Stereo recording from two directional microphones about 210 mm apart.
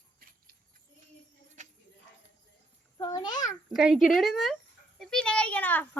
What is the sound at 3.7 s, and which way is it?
A woman's voice, centre (ahead or behind).